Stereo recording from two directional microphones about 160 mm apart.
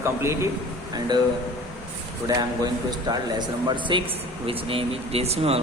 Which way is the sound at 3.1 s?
25° right (ahead or behind).